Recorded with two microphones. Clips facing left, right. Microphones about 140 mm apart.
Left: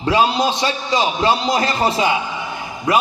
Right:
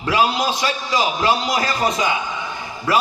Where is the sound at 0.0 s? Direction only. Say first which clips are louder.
Left 2 dB; 25° left (ahead or behind).